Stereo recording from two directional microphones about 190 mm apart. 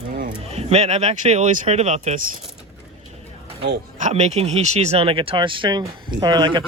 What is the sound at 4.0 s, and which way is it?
Speech, 35° right (ahead or behind).